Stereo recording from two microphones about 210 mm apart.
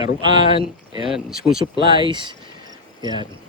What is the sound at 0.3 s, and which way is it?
Speech, 25° right (ahead or behind).